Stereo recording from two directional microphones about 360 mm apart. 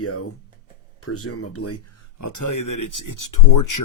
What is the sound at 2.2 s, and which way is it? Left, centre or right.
Speech, left.